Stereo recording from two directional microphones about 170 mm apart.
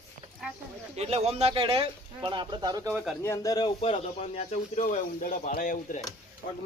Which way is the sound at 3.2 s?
20° left (ahead or behind).